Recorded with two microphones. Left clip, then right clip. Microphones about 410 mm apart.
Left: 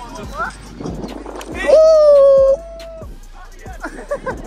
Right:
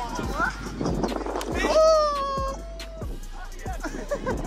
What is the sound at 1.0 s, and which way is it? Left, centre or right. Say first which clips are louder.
Music: right 1 dB; centre.